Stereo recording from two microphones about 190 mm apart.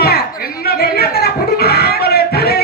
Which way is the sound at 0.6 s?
55° left (ahead or behind).